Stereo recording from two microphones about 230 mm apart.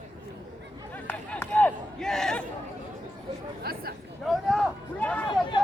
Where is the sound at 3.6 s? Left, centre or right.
Right.